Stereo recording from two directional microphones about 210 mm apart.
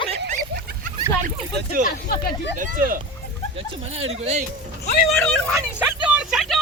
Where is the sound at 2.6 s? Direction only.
40° right (ahead or behind).